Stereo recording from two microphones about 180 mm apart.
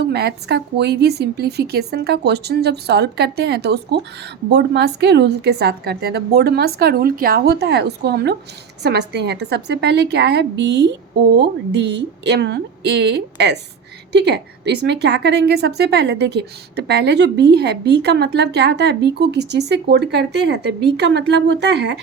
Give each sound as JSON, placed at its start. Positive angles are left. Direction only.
{"t": 0.0, "sound": "a woman's voice", "side_deg": -65}